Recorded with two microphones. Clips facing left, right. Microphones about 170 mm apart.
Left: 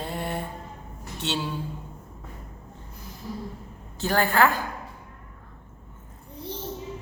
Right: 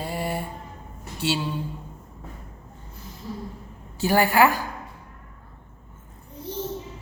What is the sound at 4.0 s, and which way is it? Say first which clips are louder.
Speech: right 3 dB; 10° right (ahead or behind).